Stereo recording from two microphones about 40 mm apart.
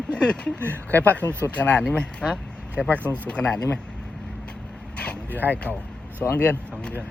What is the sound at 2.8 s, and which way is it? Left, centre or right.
Speech, left.